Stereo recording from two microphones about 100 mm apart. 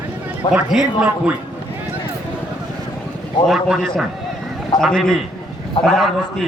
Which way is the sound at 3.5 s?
Centre (ahead or behind).